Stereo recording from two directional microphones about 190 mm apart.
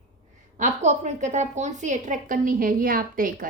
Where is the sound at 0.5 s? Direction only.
40° right (ahead or behind).